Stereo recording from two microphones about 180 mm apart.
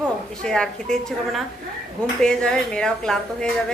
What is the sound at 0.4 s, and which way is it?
A woman's voice, 5° left (ahead or behind).